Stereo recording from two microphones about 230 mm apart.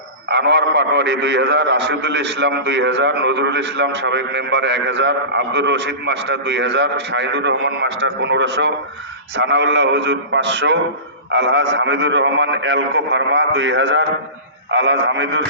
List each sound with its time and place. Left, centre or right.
0.3 s a man's voice: right